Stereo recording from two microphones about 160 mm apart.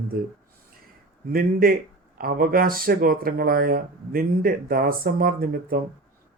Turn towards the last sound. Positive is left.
turn(degrees=-65)  # may be behind; listen again after turning